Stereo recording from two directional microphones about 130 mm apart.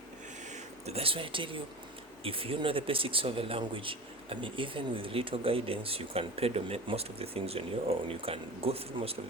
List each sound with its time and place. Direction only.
0.5 s speech: 50° right (ahead or behind)